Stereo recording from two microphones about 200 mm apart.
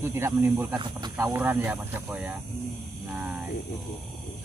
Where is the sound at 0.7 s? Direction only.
20° right (ahead or behind).